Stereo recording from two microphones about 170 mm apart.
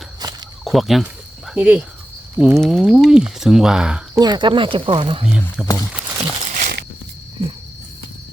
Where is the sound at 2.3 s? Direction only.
10° right (ahead or behind).